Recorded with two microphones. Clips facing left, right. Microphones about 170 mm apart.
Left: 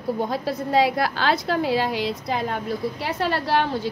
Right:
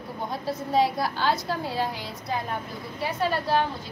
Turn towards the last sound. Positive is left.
turn(degrees=85)